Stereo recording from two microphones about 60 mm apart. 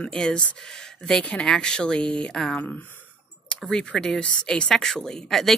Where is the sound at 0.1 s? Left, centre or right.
Centre.